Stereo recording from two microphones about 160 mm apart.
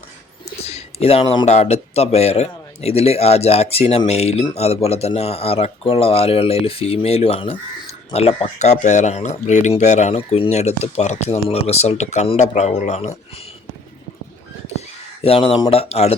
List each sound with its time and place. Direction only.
0.6 s speech: 40° left (ahead or behind)
15.2 s speech: 35° left (ahead or behind)